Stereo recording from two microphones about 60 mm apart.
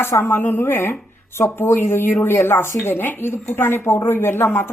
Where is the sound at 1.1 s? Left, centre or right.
Left.